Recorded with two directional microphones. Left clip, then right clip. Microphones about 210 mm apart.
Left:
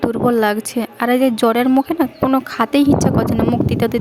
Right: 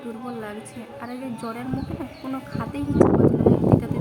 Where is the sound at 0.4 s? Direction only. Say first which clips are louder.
Left 17 dB; 50° left (ahead or behind).